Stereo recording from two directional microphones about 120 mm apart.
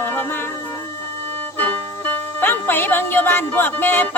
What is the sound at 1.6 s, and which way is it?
Music, 15° left (ahead or behind).